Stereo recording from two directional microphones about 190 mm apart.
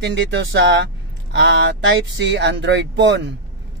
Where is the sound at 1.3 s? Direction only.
90° right.